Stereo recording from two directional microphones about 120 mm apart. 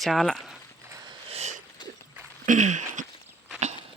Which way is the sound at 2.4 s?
90° right.